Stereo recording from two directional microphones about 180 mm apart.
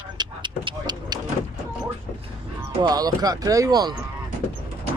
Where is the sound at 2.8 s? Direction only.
20° right (ahead or behind).